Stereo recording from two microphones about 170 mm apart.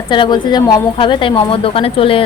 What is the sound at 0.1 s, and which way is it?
A woman's voice, 25° left (ahead or behind).